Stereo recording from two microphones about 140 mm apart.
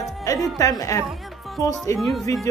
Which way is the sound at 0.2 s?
25° left (ahead or behind).